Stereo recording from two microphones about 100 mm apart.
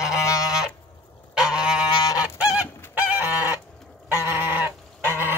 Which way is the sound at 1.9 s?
40° left (ahead or behind).